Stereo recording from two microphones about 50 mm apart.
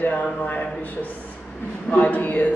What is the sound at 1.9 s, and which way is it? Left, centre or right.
Speech, left.